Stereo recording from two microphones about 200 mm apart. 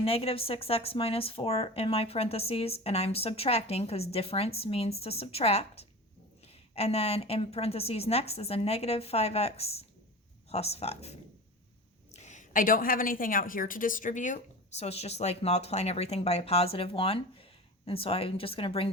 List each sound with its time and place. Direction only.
0.0 s a woman's voice: 30° left (ahead or behind)